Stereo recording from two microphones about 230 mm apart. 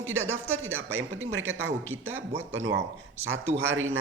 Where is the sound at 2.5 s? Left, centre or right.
Right.